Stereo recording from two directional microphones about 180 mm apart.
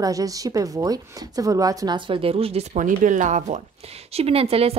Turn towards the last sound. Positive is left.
turn(degrees=-35)  # may be behind; listen again after turning